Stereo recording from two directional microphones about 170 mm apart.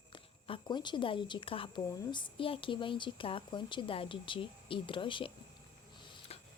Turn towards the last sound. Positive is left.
turn(degrees=35)  # may be behind; listen again after turning